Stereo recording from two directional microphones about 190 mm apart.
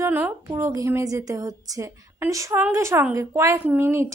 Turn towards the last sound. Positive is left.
turn(degrees=-15)  # may be behind; listen again after turning